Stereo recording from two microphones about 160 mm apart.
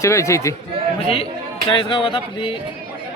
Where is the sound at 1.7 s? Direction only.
30° left (ahead or behind).